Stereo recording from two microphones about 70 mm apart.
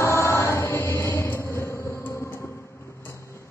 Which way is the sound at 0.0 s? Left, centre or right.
Left.